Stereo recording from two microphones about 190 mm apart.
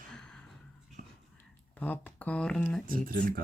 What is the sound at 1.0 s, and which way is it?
Whispering, 40° right (ahead or behind).